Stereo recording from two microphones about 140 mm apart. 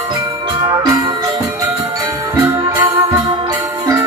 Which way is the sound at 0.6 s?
30° right (ahead or behind).